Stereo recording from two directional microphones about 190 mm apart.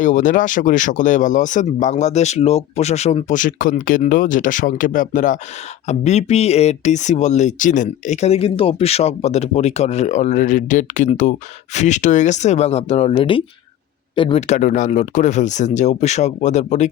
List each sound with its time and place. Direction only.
0.0 s speech: 40° left (ahead or behind)